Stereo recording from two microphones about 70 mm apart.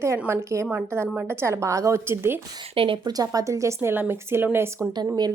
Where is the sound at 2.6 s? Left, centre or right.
Right.